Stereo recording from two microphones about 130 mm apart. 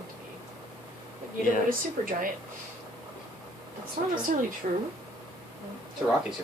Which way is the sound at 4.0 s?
75° right (ahead or behind).